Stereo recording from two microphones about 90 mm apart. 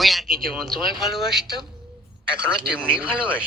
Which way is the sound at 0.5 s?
Centre (ahead or behind).